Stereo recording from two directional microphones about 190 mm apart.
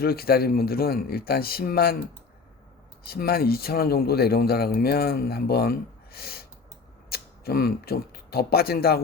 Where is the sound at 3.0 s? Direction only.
55° left (ahead or behind).